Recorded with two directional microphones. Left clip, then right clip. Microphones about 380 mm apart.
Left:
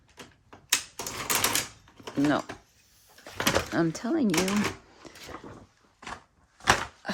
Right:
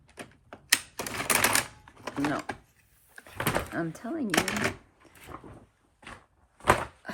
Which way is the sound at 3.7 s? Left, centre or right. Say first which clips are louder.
Left 6 dB; left.